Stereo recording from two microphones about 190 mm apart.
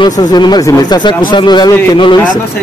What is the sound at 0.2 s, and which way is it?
Speech, 20° left (ahead or behind).